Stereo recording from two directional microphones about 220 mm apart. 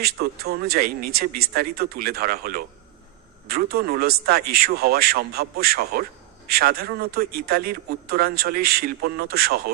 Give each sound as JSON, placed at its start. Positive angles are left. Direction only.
{"t": 0.0, "sound": "a man's voice", "side_deg": -45}